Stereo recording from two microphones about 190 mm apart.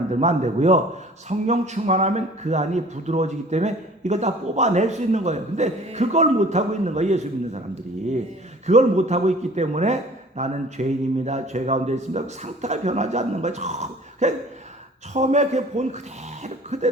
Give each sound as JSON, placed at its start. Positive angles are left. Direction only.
{"t": 0.1, "sound": "a man's voice", "side_deg": -35}
{"t": 8.6, "sound": "a man's voice", "side_deg": -35}